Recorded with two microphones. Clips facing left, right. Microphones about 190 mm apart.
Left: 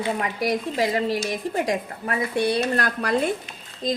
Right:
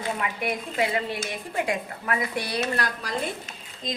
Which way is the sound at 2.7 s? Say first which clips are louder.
Left 6 dB; 55° left (ahead or behind).